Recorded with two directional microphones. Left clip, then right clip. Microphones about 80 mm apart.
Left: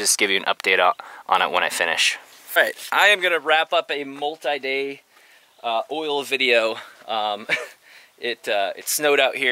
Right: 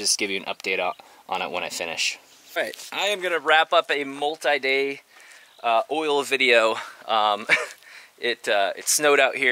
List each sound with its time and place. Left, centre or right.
0.0 s speech: left
3.2 s speech: left
3.4 s speech: centre